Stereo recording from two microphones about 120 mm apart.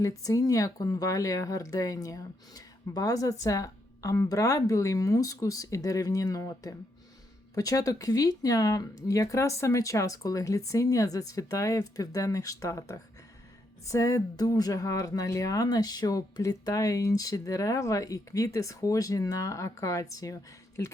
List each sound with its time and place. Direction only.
0.0 s speech: 30° left (ahead or behind)